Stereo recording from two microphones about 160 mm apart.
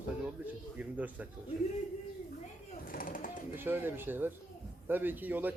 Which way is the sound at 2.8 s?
60° left (ahead or behind).